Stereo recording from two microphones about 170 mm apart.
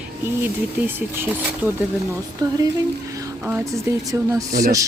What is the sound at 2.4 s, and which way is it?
A woman's voice, 25° right (ahead or behind).